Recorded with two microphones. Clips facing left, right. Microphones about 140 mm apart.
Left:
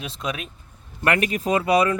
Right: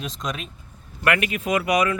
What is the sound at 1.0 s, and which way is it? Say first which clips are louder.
Speech: left 1 dB; 35° left (ahead or behind).